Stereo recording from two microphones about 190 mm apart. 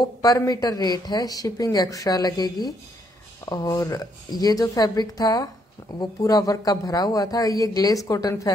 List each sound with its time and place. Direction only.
0.0 s speech: 20° left (ahead or behind)